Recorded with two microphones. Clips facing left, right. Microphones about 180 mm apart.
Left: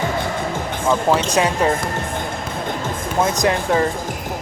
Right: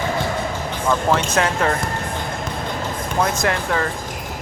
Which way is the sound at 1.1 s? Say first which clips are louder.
Left 2 dB; 15° left (ahead or behind).